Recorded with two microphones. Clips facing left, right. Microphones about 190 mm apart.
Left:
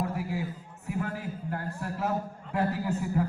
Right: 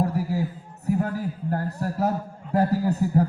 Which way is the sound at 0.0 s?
40° right (ahead or behind).